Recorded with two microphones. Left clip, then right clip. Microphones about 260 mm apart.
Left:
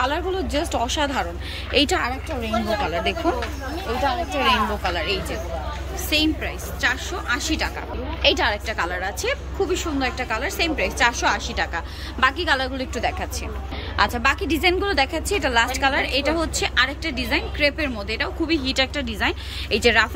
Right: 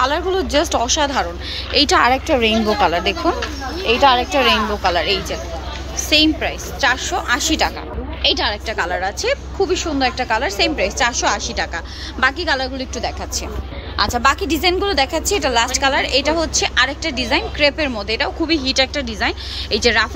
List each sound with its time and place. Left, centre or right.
0.0 s a woman's voice: centre
2.0 s a woman's voice: right
2.8 s a woman's voice: centre
13.9 s a woman's voice: centre